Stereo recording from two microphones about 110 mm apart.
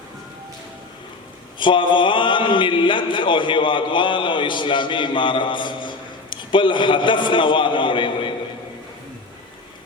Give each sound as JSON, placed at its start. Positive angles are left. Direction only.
{"t": 1.5, "sound": "a man's voice", "side_deg": 45}